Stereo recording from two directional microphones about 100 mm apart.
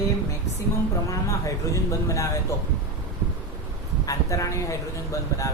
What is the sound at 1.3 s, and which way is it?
Speech, 30° left (ahead or behind).